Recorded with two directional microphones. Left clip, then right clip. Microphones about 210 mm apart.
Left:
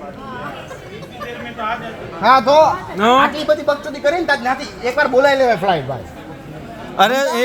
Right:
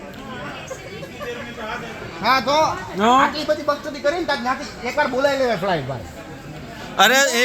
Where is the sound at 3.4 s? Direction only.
20° left (ahead or behind).